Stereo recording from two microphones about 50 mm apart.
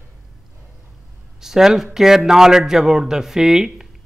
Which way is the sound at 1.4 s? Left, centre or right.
Centre.